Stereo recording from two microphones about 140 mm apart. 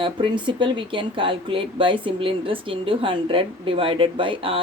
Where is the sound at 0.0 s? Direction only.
35° right (ahead or behind).